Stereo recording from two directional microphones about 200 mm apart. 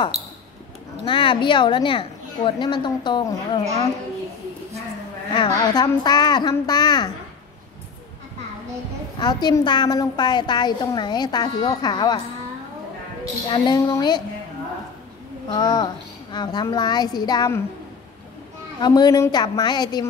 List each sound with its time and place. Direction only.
1.0 s a woman's voice: 25° left (ahead or behind)
5.3 s a woman's voice: 25° left (ahead or behind)
9.2 s a woman's voice: 20° left (ahead or behind)
13.5 s a woman's voice: 20° left (ahead or behind)
15.4 s a woman's voice: 20° left (ahead or behind)
18.8 s a woman's voice: 20° left (ahead or behind)